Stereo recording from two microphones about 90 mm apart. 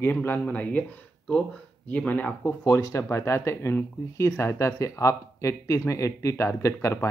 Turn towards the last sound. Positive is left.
turn(degrees=35)  # may be behind; listen again after turning